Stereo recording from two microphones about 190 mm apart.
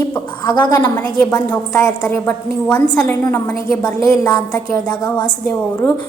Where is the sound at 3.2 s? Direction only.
15° left (ahead or behind).